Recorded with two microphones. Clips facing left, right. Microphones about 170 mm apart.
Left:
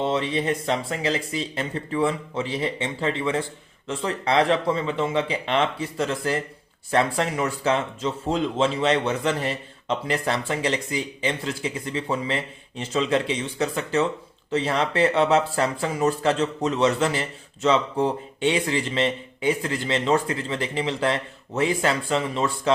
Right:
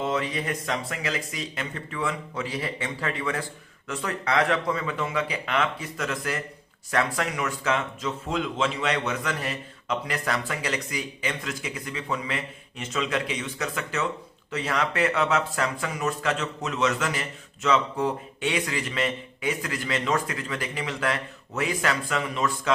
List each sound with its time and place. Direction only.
0.0 s speech: 30° left (ahead or behind)